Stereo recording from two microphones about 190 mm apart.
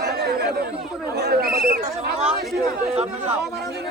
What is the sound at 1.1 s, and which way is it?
Speech, 55° right (ahead or behind).